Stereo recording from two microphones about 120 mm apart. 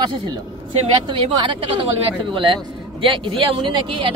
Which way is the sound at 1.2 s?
45° right (ahead or behind).